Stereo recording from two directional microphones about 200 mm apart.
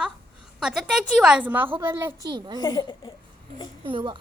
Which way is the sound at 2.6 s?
20° left (ahead or behind).